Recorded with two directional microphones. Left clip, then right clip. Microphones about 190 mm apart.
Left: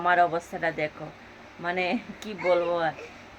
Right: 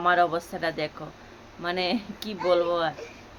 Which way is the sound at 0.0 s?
5° right (ahead or behind).